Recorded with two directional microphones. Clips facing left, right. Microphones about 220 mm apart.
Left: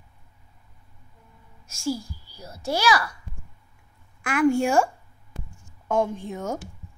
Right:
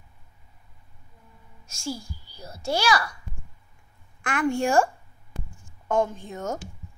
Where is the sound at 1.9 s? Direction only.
10° left (ahead or behind).